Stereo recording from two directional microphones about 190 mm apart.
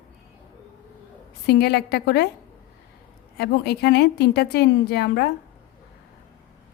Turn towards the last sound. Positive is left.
turn(degrees=60)  # may be behind; listen again after turning